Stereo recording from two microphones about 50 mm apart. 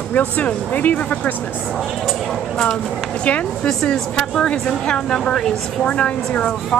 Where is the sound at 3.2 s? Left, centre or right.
Left.